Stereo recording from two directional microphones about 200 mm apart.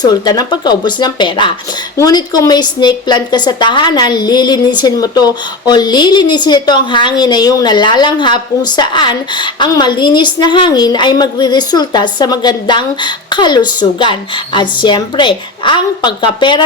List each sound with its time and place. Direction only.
0.0 s a woman's voice: 20° left (ahead or behind)